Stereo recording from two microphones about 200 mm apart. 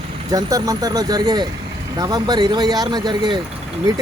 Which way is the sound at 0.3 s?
20° right (ahead or behind).